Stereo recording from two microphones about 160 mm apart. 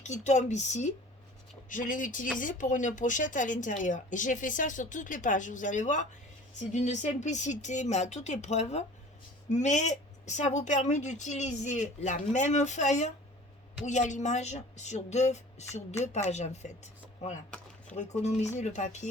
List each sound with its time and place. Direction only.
0.0 s a woman's voice: 45° left (ahead or behind)